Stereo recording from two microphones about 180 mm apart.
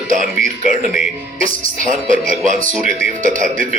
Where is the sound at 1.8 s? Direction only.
45° right (ahead or behind).